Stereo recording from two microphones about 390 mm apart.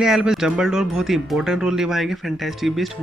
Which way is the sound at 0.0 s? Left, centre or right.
Centre.